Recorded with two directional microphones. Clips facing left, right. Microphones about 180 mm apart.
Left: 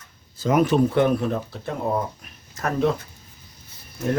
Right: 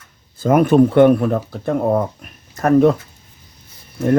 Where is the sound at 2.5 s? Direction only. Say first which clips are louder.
Right 10 dB; 50° right (ahead or behind).